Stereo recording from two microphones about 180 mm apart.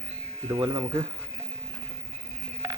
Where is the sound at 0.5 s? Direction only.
25° right (ahead or behind).